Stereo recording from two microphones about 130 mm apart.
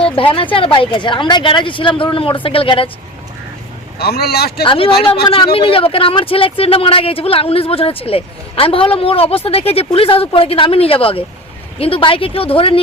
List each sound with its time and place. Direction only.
0.3 s speech: 45° left (ahead or behind)
4.6 s speech: 40° left (ahead or behind)